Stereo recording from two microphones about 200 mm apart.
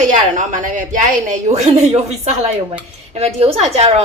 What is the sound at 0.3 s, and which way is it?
Speech, 40° right (ahead or behind).